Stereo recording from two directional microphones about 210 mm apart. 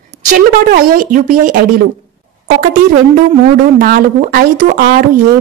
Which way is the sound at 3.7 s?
40° right (ahead or behind).